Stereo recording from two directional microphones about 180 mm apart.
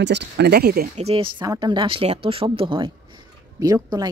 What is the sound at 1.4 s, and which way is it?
A woman's voice, 20° right (ahead or behind).